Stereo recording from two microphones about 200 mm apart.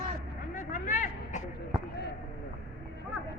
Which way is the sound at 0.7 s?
40° left (ahead or behind).